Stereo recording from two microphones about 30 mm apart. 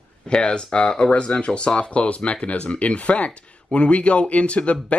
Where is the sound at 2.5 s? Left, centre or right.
Left.